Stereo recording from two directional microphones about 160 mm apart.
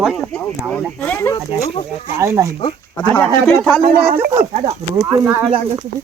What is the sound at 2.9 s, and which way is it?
Speech, 10° left (ahead or behind).